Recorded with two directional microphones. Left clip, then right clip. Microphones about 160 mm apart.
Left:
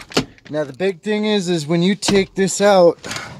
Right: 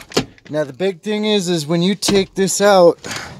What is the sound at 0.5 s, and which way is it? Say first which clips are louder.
Speech: right 2 dB; 20° right (ahead or behind).